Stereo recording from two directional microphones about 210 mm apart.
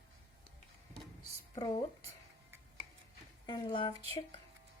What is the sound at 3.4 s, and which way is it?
Speech, 20° left (ahead or behind).